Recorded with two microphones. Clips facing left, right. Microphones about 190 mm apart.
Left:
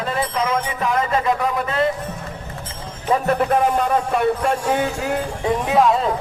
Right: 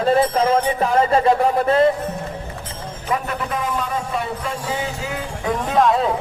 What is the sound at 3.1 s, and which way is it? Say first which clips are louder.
A man's voice: left 6 dB; 45° left (ahead or behind).